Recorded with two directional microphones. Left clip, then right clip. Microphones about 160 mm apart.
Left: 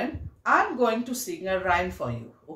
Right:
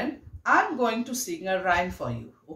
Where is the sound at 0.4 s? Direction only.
15° right (ahead or behind).